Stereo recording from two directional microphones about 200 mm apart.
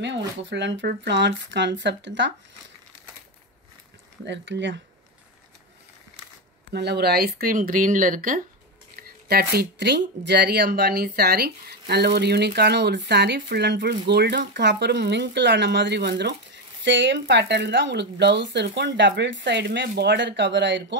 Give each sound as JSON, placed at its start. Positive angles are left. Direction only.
{"t": 0.5, "sound": "speech", "side_deg": -60}
{"t": 4.2, "sound": "speech", "side_deg": -65}
{"t": 6.7, "sound": "speech", "side_deg": -55}